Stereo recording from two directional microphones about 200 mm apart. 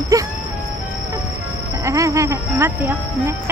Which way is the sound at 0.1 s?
15° right (ahead or behind).